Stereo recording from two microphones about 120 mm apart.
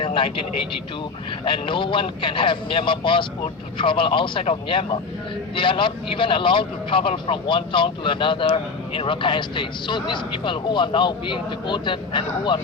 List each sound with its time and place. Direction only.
0.0 s a man's voice: 45° left (ahead or behind)